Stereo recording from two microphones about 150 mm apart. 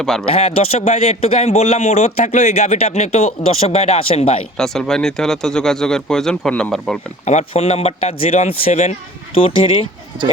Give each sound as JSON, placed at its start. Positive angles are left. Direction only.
{"t": 0.0, "sound": "speech", "side_deg": 5}
{"t": 0.3, "sound": "a man's voice", "side_deg": 40}
{"t": 4.5, "sound": "speech", "side_deg": 5}
{"t": 7.3, "sound": "a man's voice", "side_deg": 45}